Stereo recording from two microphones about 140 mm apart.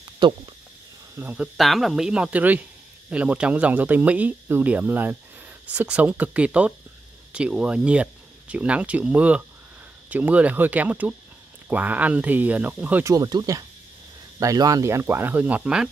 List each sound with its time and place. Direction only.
0.2 s speech: 35° right (ahead or behind)
1.1 s speech: 10° right (ahead or behind)
1.6 s speech: centre (ahead or behind)
13.0 s speech: 25° right (ahead or behind); by 15.9 s 5° right (ahead or behind)